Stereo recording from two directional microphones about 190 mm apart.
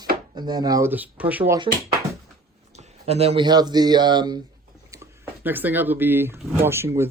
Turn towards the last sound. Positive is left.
turn(degrees=-15)  # may be behind; listen again after turning